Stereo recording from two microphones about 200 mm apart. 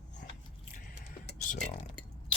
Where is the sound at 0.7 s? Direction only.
40° left (ahead or behind).